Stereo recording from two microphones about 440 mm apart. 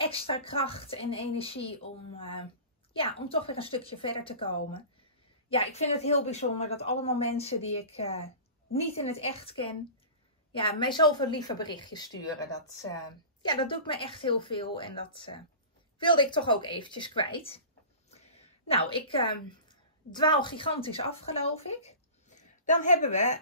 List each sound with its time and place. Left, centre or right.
0.0 s speech: centre
13.4 s a woman's voice: centre